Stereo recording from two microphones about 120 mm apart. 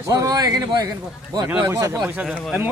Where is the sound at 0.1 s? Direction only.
30° right (ahead or behind).